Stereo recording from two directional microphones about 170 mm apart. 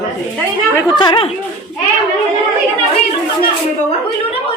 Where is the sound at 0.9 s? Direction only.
30° left (ahead or behind).